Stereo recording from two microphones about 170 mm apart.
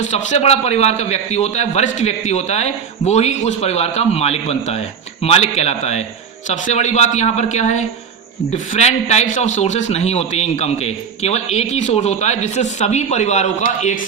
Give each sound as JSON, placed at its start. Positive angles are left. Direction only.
{"t": 0.0, "sound": "a man's voice", "side_deg": 45}